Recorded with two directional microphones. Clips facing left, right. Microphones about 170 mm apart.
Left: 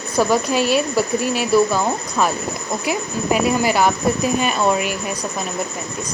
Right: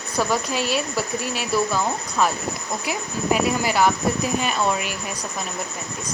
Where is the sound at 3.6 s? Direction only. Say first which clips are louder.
Left 3 dB; 15° left (ahead or behind).